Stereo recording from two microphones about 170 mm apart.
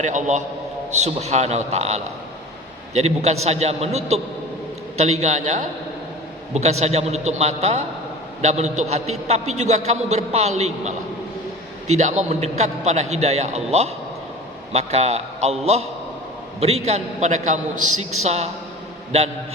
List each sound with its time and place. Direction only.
0.0 s a man's voice: 45° right (ahead or behind)